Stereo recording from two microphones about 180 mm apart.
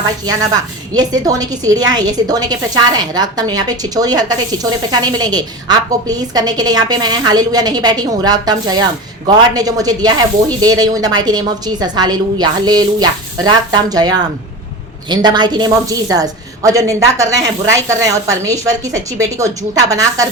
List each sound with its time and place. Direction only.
0.9 s a woman's voice: 20° right (ahead or behind)
15.1 s a woman's voice: 25° right (ahead or behind)